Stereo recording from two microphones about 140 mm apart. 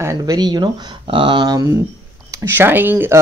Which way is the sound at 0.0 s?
25° right (ahead or behind).